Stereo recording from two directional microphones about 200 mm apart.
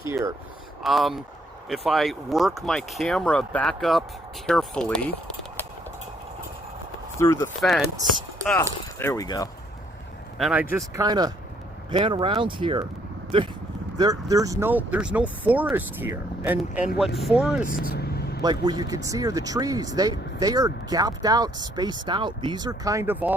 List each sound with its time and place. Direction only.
0.8 s speech: centre (ahead or behind)
7.2 s speech: 15° left (ahead or behind)
10.3 s speech: 5° right (ahead or behind)
11.0 s speech: 20° right (ahead or behind); by 17.7 s 5° right (ahead or behind)
17.7 s vehicle: 45° left (ahead or behind)
18.4 s speech: 20° right (ahead or behind)